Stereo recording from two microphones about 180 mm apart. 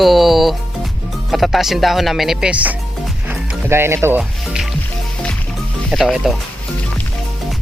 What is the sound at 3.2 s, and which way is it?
Music, 10° right (ahead or behind).